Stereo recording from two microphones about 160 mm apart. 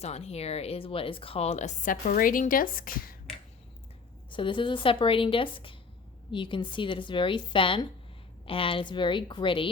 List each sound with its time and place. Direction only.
0.0 s speech: 40° left (ahead or behind); by 3.2 s 60° left (ahead or behind)
4.3 s a woman's voice: 30° left (ahead or behind)